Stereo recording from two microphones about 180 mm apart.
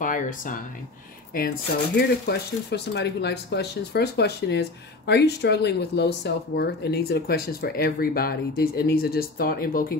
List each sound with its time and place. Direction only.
0.0 s speech: 45° left (ahead or behind)
2.0 s speech: 65° left (ahead or behind)